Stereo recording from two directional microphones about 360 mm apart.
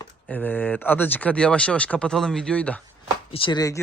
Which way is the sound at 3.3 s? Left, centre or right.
Centre.